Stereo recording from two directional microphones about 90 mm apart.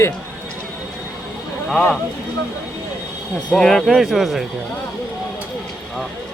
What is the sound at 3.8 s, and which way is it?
Speech, 5° right (ahead or behind).